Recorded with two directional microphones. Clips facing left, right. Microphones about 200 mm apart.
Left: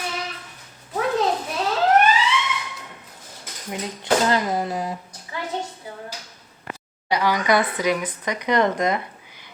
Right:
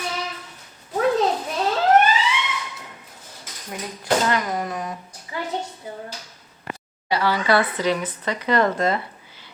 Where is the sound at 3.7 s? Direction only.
25° left (ahead or behind).